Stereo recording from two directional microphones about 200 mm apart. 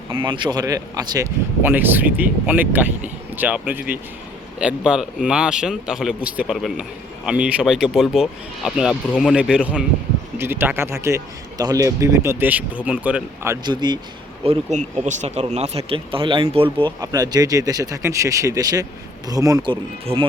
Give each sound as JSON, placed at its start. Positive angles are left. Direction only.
{"t": 0.3, "sound": "a man's voice", "side_deg": -20}
{"t": 14.4, "sound": "speech", "side_deg": -35}